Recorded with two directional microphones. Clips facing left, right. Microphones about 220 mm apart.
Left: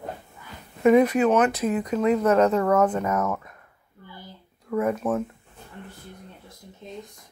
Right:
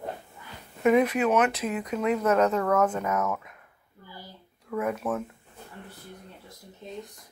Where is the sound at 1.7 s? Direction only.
35° left (ahead or behind).